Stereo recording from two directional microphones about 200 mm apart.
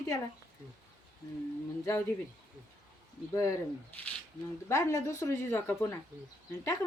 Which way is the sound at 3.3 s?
15° left (ahead or behind).